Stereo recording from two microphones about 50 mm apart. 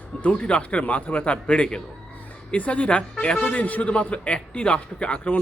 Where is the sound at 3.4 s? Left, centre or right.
Left.